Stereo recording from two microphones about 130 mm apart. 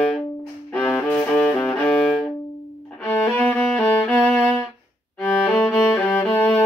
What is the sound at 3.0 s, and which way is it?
Violin, 10° left (ahead or behind).